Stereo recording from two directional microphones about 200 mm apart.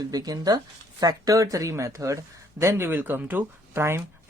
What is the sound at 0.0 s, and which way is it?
Speech, 20° right (ahead or behind).